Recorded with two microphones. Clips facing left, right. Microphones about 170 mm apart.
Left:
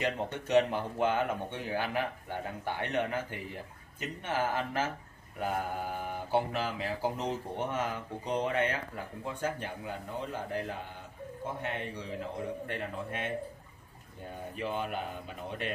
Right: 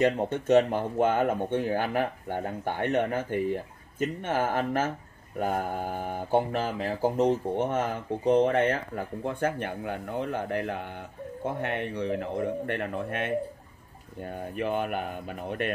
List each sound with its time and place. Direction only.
0.0 s a man's voice: 50° right (ahead or behind)